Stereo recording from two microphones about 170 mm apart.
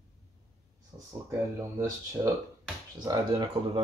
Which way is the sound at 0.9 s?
20° right (ahead or behind).